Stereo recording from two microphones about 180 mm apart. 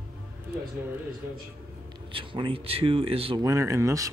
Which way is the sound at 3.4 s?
15° right (ahead or behind).